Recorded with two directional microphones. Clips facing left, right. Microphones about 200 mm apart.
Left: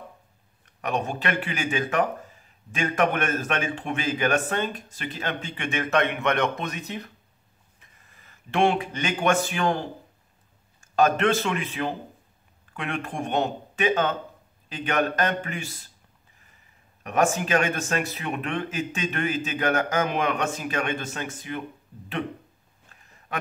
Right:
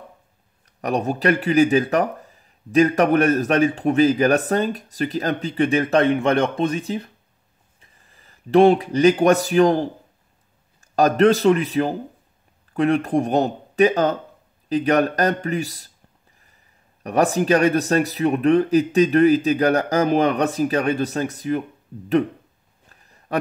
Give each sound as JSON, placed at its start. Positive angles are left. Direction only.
{"t": 0.7, "sound": "speech", "side_deg": -35}
{"t": 17.0, "sound": "speech", "side_deg": -35}
{"t": 22.8, "sound": "a sound", "side_deg": -35}